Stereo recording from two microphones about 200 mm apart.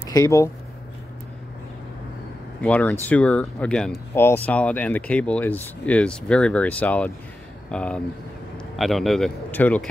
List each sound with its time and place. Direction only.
0.0 s speech: 15° left (ahead or behind)
2.6 s a man's voice: 5° left (ahead or behind)